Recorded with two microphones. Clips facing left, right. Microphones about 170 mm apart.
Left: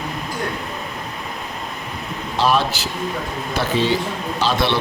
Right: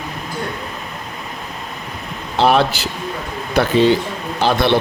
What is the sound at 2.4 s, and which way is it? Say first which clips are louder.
Speech: right 4 dB; 60° right (ahead or behind).